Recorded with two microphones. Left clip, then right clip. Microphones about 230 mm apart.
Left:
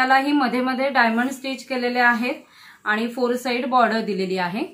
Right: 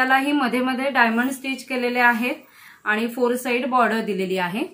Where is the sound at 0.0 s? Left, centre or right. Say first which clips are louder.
Left 1 dB; centre.